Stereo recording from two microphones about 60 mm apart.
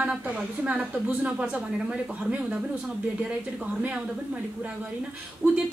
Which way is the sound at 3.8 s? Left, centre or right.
Centre.